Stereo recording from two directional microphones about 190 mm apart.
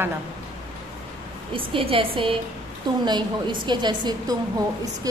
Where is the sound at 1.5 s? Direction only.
30° right (ahead or behind).